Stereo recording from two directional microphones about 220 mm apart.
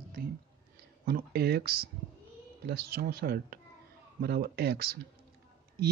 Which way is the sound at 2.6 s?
45° right (ahead or behind).